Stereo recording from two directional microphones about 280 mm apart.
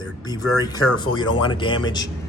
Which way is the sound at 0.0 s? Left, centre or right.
Centre.